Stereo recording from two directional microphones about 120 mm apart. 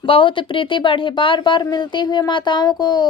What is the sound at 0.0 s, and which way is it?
Speech, 45° left (ahead or behind).